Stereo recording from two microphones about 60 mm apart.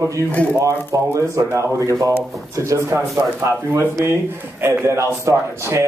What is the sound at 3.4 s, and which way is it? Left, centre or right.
A man's voice, right.